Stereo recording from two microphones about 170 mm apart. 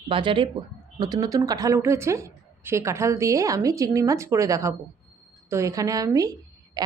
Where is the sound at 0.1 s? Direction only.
30° right (ahead or behind).